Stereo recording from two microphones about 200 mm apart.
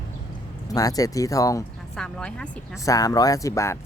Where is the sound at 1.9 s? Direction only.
5° left (ahead or behind).